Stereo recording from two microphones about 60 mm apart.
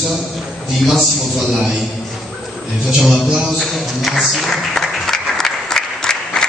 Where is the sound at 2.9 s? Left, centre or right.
Centre.